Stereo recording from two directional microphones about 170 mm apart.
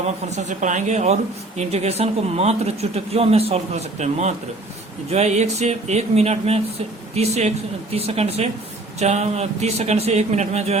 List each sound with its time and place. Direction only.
0.3 s speech: 45° right (ahead or behind)